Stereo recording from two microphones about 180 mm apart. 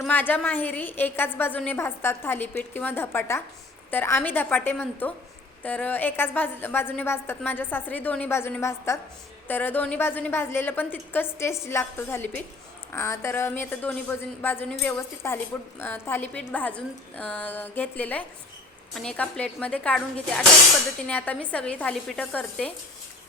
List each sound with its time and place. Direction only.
0.0 s a woman's voice: 10° left (ahead or behind)
21.1 s a woman's voice: 10° left (ahead or behind)